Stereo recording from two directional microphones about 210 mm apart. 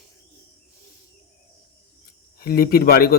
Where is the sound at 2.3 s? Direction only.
45° left (ahead or behind).